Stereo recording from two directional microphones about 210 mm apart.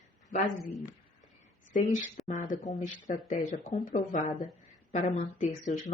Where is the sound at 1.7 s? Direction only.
35° left (ahead or behind).